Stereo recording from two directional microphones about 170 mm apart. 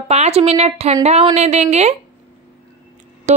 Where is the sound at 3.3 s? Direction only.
45° right (ahead or behind).